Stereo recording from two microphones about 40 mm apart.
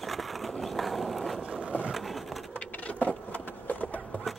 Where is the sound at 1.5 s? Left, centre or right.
Right.